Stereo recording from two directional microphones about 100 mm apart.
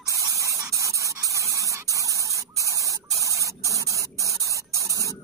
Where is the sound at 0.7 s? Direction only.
30° right (ahead or behind).